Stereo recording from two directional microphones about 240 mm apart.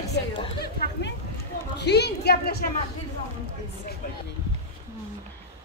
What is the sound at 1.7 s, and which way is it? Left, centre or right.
Speech, left.